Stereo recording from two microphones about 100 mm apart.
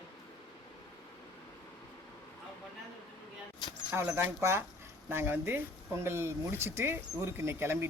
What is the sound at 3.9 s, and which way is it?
Speech, 25° right (ahead or behind).